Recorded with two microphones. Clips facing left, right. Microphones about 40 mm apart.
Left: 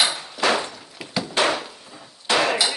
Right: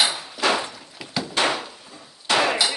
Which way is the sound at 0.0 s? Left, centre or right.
Centre.